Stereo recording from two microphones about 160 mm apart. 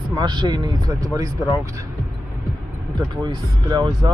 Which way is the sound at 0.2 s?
25° right (ahead or behind).